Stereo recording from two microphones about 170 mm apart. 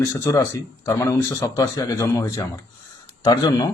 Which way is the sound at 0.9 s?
20° left (ahead or behind).